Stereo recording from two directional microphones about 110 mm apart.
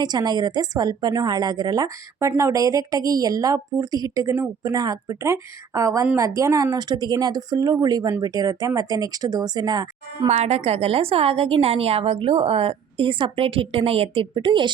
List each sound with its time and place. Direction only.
0.0 s speech: 40° right (ahead or behind)
10.2 s a woman's voice: 80° right; by 14.7 s 45° right (ahead or behind)